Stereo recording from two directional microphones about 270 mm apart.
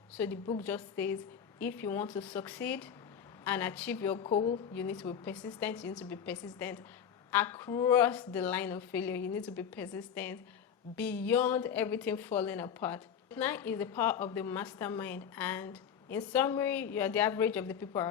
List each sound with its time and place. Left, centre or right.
0.2 s a woman's voice: centre
4.2 s a woman's voice: centre
4.7 s a woman's voice: centre